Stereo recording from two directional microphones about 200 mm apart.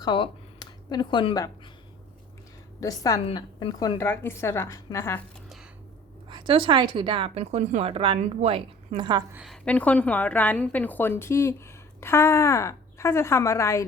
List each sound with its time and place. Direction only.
0.0 s speech: 20° left (ahead or behind)
2.8 s a woman's voice: 15° left (ahead or behind)
6.2 s speech: 25° right (ahead or behind)
9.3 s a woman's voice: centre (ahead or behind); by 13.8 s 15° left (ahead or behind)